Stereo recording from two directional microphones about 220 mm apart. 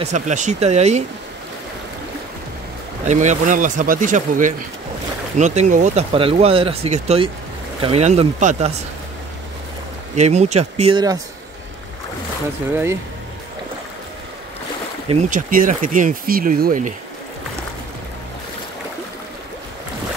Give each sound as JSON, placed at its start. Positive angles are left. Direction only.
{"t": 0.0, "sound": "speech", "side_deg": -35}
{"t": 3.1, "sound": "speech", "side_deg": -35}
{"t": 10.1, "sound": "speech", "side_deg": -30}
{"t": 15.0, "sound": "speech", "side_deg": -35}